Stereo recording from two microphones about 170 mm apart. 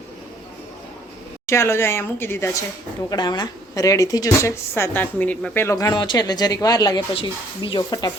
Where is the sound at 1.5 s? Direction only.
15° left (ahead or behind).